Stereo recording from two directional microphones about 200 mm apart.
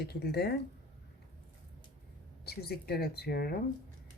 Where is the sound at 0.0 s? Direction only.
55° left (ahead or behind).